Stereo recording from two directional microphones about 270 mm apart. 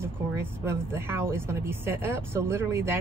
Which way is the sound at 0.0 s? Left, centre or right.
Centre.